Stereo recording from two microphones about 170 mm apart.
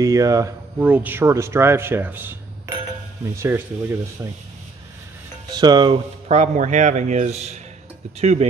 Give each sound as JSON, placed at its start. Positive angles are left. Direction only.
{"t": 0.0, "sound": "speech", "side_deg": -20}
{"t": 5.5, "sound": "speech", "side_deg": -25}
{"t": 6.2, "sound": "speech", "side_deg": -40}